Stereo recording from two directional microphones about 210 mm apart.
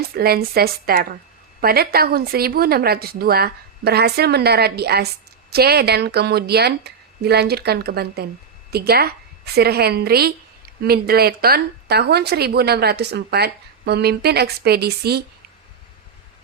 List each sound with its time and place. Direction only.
0.1 s speech: 50° right (ahead or behind)